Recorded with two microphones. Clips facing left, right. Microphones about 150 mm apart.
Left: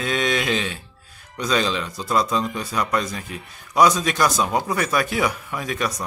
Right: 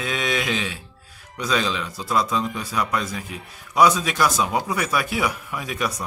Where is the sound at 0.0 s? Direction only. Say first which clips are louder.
Left 2 dB; 5° right (ahead or behind).